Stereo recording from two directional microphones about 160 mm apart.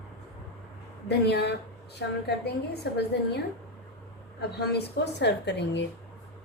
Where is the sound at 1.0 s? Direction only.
90° left.